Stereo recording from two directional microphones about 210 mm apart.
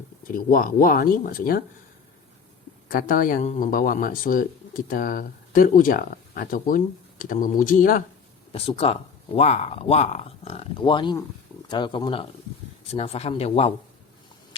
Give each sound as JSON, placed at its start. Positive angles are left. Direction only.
{"t": 0.3, "sound": "speech", "side_deg": 40}
{"t": 2.9, "sound": "speech", "side_deg": 40}
{"t": 8.5, "sound": "speech", "side_deg": 30}